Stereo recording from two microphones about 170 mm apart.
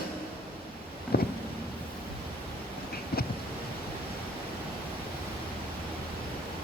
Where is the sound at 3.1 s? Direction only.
65° left (ahead or behind).